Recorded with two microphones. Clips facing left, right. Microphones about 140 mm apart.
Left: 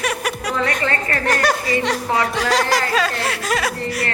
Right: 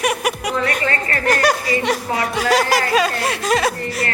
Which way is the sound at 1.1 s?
Centre (ahead or behind).